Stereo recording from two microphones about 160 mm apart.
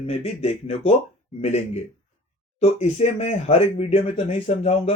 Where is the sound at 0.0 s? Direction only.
40° left (ahead or behind).